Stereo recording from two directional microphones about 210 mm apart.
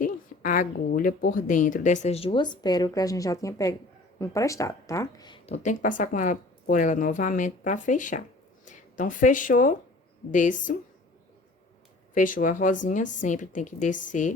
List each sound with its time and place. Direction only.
0.0 s speech: 40° left (ahead or behind); by 5.5 s 20° left (ahead or behind)
5.6 s speech: 40° left (ahead or behind)
12.1 s speech: 40° left (ahead or behind)